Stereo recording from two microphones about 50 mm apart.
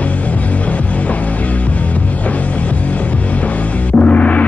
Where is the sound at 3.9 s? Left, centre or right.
Left.